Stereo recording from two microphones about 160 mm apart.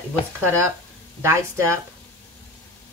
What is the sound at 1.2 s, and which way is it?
Speech, 15° right (ahead or behind).